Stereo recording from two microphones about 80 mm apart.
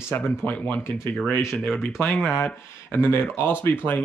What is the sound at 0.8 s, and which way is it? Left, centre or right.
Speech, left.